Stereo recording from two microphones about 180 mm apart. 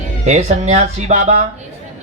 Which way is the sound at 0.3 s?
40° right (ahead or behind).